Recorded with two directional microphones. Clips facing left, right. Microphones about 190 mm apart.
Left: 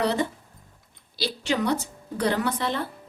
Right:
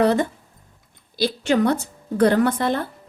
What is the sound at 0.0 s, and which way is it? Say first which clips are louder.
A woman's voice: right 6 dB; 50° right (ahead or behind).